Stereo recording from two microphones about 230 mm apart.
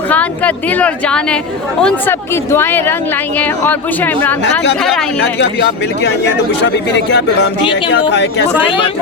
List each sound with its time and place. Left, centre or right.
0.1 s a woman's voice: centre
5.2 s speech: left